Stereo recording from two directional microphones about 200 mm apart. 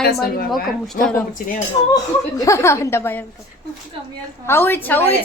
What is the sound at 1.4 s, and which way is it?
Speech, 45° left (ahead or behind).